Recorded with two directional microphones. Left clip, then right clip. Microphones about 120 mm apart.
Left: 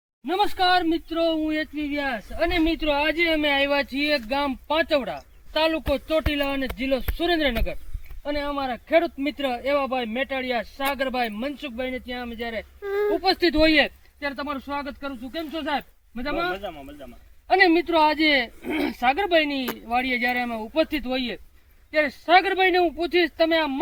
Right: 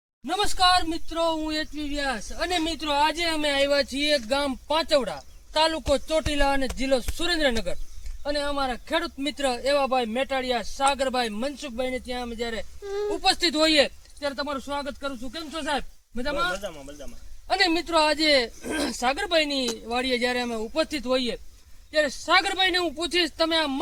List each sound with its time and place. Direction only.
0.3 s speech: 50° right (ahead or behind)
12.8 s speech: 25° left (ahead or behind)
13.2 s speech: 40° right (ahead or behind)